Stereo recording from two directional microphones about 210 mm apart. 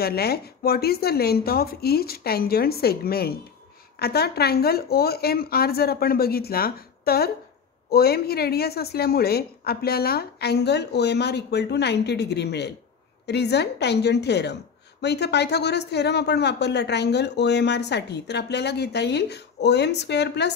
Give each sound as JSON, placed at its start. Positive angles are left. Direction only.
{"t": 0.0, "sound": "a woman's voice", "side_deg": 50}